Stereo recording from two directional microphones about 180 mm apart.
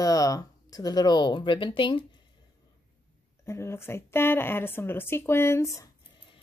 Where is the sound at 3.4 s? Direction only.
15° left (ahead or behind).